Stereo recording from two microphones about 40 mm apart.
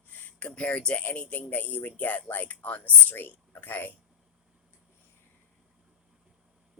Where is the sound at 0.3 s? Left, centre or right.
Left.